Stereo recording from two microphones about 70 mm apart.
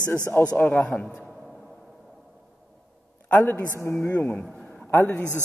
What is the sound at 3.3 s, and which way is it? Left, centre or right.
Speech, centre.